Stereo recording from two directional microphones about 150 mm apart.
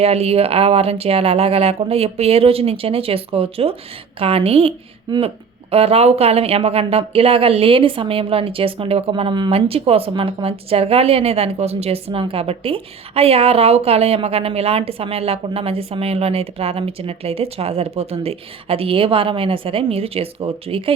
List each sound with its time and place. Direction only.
0.0 s speech: 45° right (ahead or behind)
5.1 s speech: 25° right (ahead or behind)
5.7 s speech: 40° right (ahead or behind)